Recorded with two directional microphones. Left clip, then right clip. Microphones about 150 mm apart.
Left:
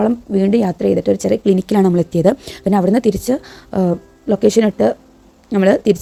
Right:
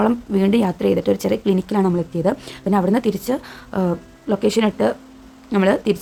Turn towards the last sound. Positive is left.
turn(degrees=35)  # may be behind; listen again after turning